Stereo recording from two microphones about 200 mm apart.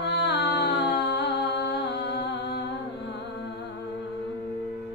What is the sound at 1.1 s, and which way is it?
Music, 55° left (ahead or behind).